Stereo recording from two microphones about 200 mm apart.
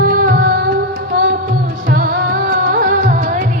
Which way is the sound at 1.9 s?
45° right (ahead or behind).